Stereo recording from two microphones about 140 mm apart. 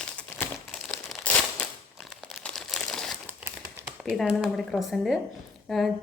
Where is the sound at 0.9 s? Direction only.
10° left (ahead or behind).